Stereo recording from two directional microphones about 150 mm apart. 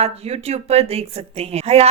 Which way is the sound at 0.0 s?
45° right (ahead or behind).